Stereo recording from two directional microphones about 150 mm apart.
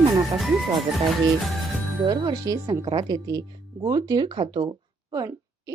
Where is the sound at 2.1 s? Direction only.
30° right (ahead or behind).